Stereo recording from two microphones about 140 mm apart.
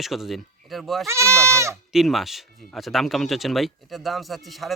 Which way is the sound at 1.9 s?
Centre (ahead or behind).